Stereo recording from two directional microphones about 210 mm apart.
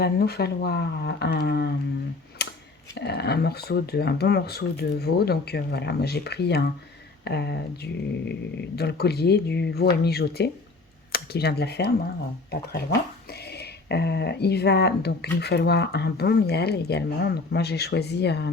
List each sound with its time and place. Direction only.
0.0 s speech: 50° left (ahead or behind)
2.4 s a sound: 50° left (ahead or behind)
2.9 s speech: 55° left (ahead or behind)